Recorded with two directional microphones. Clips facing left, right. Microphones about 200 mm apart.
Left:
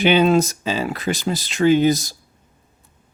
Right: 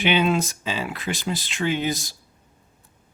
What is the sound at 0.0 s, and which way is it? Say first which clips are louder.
Speech: left 6 dB; 40° left (ahead or behind).